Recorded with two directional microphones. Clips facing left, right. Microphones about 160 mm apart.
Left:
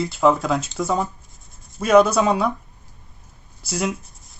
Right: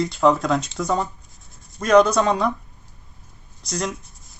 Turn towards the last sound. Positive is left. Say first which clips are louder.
# left 2 dB
turn(degrees=5)  # may be behind; listen again after turning